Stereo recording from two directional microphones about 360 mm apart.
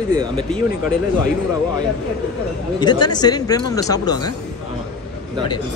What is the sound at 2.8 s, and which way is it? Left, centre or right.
Speech, centre.